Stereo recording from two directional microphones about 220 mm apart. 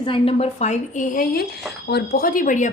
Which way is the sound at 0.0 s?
25° left (ahead or behind).